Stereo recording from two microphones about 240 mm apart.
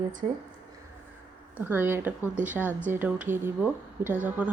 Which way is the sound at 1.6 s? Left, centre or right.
Centre.